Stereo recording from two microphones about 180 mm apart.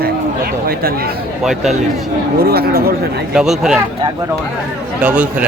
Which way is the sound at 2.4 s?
60° right (ahead or behind).